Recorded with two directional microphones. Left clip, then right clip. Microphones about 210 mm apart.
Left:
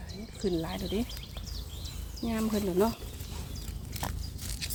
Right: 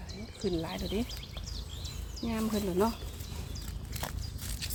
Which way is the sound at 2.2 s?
10° left (ahead or behind).